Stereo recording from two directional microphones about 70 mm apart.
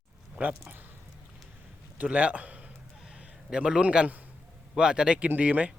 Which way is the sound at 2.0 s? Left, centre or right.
Centre.